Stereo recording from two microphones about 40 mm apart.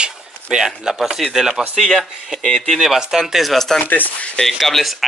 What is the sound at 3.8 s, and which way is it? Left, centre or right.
Speech, left.